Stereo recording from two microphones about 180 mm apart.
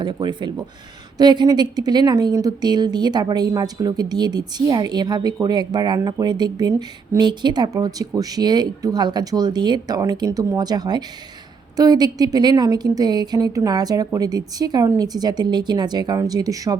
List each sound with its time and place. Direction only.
0.0 s a woman's voice: 25° right (ahead or behind)